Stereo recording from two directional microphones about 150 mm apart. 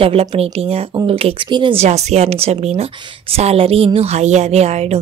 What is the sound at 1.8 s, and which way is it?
Speech, 50° right (ahead or behind).